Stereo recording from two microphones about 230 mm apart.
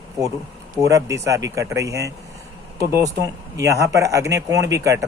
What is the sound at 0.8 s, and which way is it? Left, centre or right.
A man's voice, centre.